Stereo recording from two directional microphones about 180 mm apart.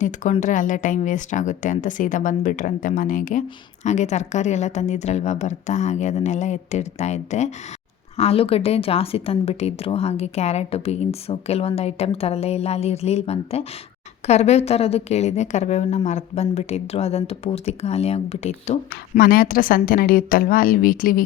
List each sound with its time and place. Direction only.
0.0 s speech: 45° left (ahead or behind)
19.2 s speech: 55° left (ahead or behind)